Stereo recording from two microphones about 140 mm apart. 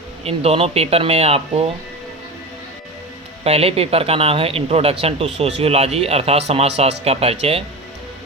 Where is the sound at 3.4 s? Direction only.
45° right (ahead or behind).